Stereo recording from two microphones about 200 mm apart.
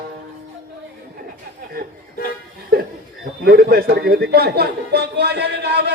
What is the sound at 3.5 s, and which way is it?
Speech, 50° right (ahead or behind).